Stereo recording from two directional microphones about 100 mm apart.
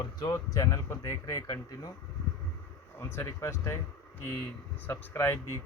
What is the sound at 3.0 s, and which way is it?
Speech, 25° left (ahead or behind).